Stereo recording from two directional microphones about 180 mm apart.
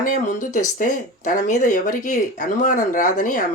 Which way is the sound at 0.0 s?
45° left (ahead or behind).